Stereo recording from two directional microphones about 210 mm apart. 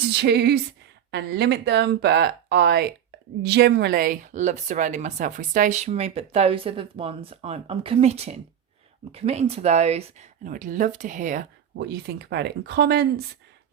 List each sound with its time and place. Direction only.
0.1 s speech: 50° right (ahead or behind)
11.8 s speech: 50° right (ahead or behind)